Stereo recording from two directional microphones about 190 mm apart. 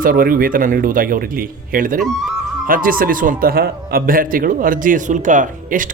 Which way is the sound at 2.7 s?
45° right (ahead or behind).